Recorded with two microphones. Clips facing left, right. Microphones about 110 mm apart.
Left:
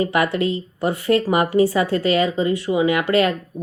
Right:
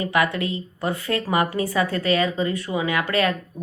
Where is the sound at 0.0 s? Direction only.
25° left (ahead or behind).